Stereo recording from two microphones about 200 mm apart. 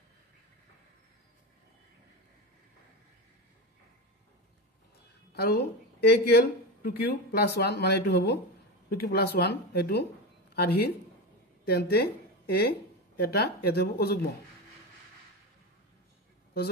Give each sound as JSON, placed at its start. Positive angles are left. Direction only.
{"t": 5.3, "sound": "a woman's voice", "side_deg": 55}